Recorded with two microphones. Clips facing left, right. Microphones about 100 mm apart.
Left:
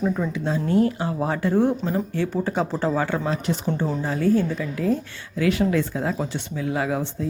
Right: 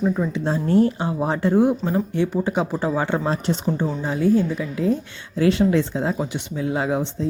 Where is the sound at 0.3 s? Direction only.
35° right (ahead or behind).